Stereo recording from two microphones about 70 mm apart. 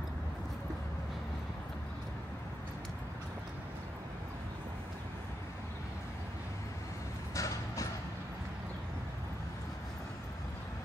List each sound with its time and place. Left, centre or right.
7.3 s music: left